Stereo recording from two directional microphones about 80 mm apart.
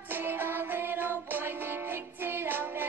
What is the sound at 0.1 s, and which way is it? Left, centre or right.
Music, right.